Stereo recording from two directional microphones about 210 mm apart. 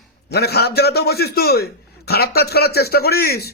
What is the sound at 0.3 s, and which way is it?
A man's voice, 50° left (ahead or behind).